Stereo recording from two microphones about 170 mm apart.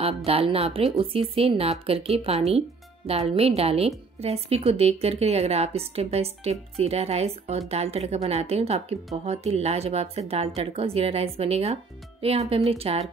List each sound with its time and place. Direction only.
0.0 s a woman's voice: 35° right (ahead or behind)